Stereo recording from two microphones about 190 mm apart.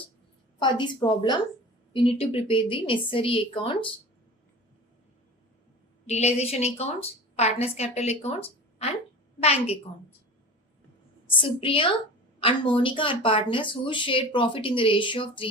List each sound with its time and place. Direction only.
1.0 s a woman's voice: 20° left (ahead or behind)
6.1 s a woman's voice: 35° left (ahead or behind)
11.3 s a woman's voice: 25° left (ahead or behind)